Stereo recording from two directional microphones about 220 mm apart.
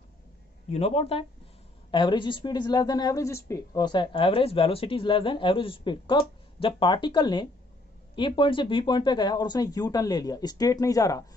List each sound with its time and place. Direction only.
0.7 s a woman's voice: 25° left (ahead or behind)